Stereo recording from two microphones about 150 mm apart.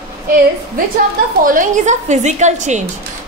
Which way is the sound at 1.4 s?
65° right (ahead or behind).